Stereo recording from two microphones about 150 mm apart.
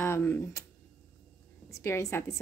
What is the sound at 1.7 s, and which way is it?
Speech, 20° left (ahead or behind).